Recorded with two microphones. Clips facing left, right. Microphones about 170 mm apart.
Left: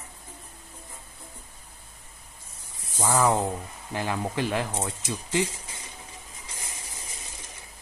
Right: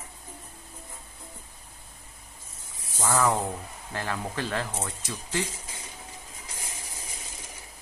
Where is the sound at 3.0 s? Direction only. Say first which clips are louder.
Left 2 dB; 10° left (ahead or behind).